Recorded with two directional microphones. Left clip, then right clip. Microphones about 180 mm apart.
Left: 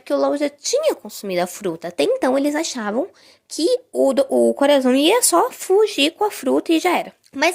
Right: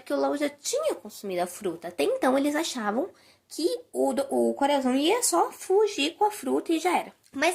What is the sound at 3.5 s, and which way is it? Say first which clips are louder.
Speech: left 9 dB; 55° left (ahead or behind).